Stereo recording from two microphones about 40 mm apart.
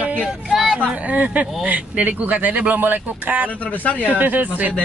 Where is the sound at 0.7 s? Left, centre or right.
Right.